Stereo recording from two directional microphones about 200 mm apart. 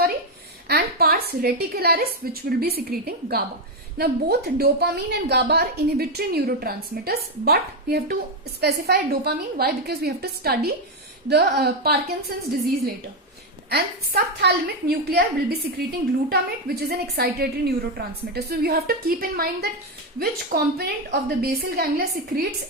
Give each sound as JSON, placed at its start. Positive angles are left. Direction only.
{"t": 0.7, "sound": "a woman's voice", "side_deg": -50}
{"t": 13.7, "sound": "a woman's voice", "side_deg": -55}